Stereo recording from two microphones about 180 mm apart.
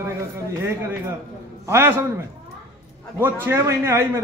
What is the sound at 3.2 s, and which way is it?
A man's voice, 15° right (ahead or behind).